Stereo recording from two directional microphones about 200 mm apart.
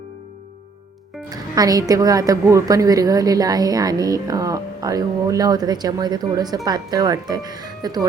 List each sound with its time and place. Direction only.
1.3 s a woman's voice: 20° right (ahead or behind)